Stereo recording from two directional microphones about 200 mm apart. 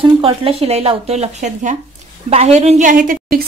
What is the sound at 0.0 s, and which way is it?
A woman's voice, 30° right (ahead or behind).